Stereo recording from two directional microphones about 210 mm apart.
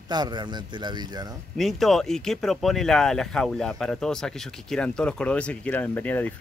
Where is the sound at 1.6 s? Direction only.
Centre (ahead or behind).